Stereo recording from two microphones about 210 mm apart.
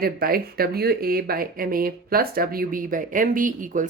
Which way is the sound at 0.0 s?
45° right (ahead or behind).